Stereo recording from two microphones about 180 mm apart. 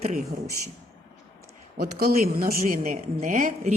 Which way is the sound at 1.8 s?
55° right (ahead or behind).